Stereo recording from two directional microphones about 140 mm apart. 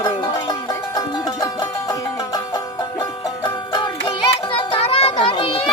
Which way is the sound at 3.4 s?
35° left (ahead or behind).